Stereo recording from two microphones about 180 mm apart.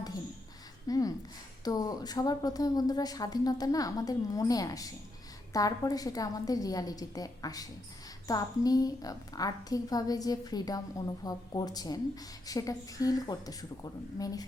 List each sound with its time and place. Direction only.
0.9 s a woman's voice: 20° left (ahead or behind)